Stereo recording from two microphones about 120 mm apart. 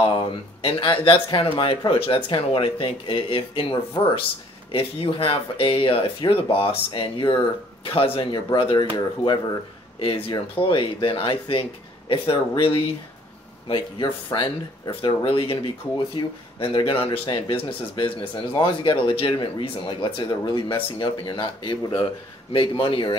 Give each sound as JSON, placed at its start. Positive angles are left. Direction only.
{"t": 0.0, "sound": "speech", "side_deg": 45}
{"t": 9.9, "sound": "speech", "side_deg": 50}
{"t": 22.5, "sound": "speech", "side_deg": 45}